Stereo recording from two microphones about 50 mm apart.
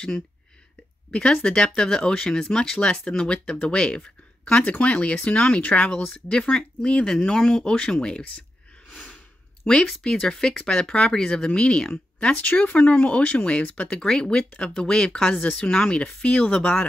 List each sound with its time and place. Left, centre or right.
1.1 s speech: centre
5.6 s speech: left
9.6 s speech: left
13.9 s speech: centre